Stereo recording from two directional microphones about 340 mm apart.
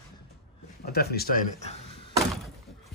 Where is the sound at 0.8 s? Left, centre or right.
Left.